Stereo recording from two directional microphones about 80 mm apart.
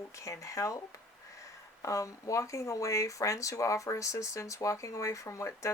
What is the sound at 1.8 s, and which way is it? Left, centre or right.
Speech, left.